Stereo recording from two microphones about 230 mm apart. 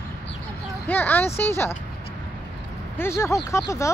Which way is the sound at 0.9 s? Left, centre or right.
Centre.